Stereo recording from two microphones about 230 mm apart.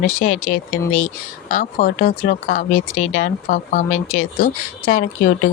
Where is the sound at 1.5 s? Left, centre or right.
Left.